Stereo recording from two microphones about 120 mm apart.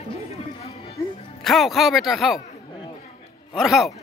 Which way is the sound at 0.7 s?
60° left (ahead or behind).